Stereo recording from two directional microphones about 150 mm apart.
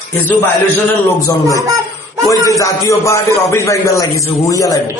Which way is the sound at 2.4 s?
20° left (ahead or behind).